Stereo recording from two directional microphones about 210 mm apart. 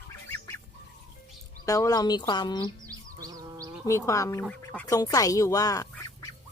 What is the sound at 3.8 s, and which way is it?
Speech, 15° left (ahead or behind).